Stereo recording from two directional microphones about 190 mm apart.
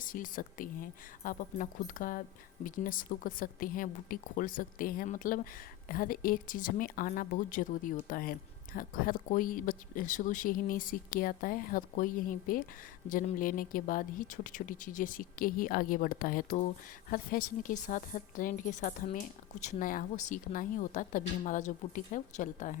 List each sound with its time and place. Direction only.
0.0 s a woman's voice: 45° left (ahead or behind)